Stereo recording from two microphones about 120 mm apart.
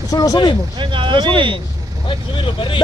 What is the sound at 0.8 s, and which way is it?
Speech, 45° right (ahead or behind).